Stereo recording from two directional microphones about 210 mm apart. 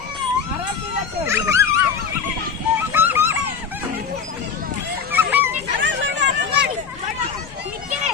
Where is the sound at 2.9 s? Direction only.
10° right (ahead or behind).